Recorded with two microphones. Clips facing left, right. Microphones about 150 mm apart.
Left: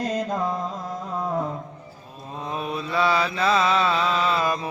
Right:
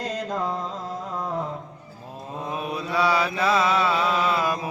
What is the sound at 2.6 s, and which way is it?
Mantra, 10° right (ahead or behind).